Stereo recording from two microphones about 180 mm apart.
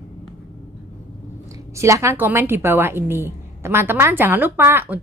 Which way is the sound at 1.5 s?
15° right (ahead or behind).